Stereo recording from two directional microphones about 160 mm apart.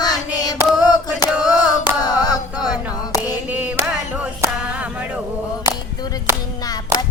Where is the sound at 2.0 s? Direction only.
25° left (ahead or behind).